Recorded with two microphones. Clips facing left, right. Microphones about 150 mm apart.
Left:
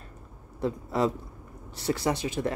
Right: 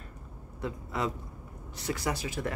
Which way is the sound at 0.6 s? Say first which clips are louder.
Left 7 dB; 35° left (ahead or behind).